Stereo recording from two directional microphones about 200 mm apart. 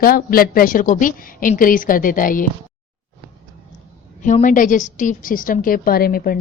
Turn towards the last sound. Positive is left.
turn(degrees=50)  # may be behind; listen again after turning